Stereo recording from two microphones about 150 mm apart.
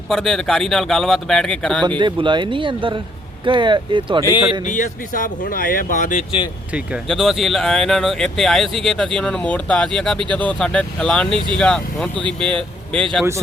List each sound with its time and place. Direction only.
0.1 s speech: 5° left (ahead or behind)
2.0 s speech: 30° right (ahead or behind)
4.6 s speech: 60° left (ahead or behind)
7.1 s speech: centre (ahead or behind)